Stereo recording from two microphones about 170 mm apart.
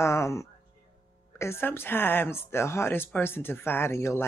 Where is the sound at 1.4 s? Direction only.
15° left (ahead or behind).